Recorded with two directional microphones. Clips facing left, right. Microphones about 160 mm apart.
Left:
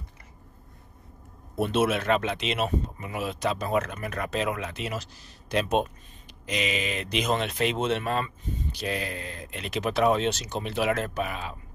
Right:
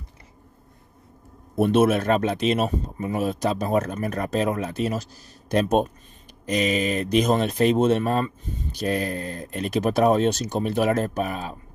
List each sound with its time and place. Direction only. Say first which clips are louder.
1.6 s speech: right 6 dB; 50° right (ahead or behind)